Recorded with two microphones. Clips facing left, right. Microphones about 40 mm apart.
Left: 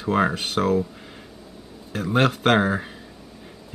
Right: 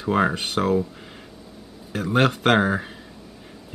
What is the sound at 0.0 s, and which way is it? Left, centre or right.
Speech, centre.